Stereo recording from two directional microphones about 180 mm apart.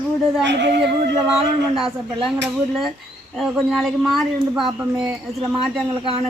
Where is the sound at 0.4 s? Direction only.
75° right (ahead or behind).